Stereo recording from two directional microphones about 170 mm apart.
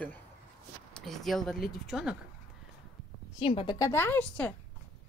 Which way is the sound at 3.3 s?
30° left (ahead or behind).